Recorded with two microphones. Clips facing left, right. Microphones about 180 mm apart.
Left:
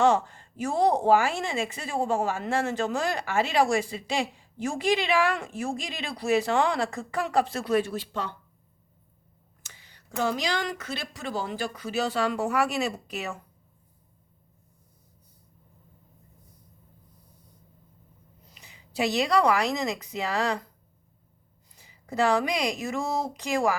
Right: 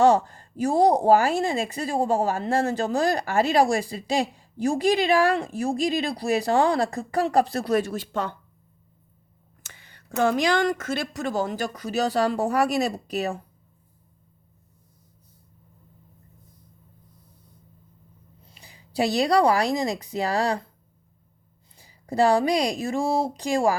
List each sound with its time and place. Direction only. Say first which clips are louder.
0.0 s speech: right 4 dB; 40° right (ahead or behind)
9.6 s speech: right 6 dB; 55° right (ahead or behind); by 13.4 s 35° right (ahead or behind)
18.4 s speech: right 2 dB; 30° right (ahead or behind)
21.8 s speech: right 5 dB; 30° right (ahead or behind)